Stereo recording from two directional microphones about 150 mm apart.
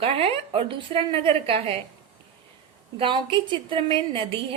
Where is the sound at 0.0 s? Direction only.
40° right (ahead or behind).